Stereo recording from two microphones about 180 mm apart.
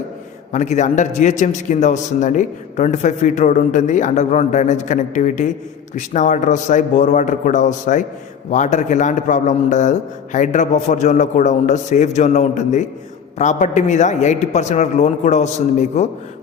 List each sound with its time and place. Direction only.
0.5 s a man's voice: 40° left (ahead or behind)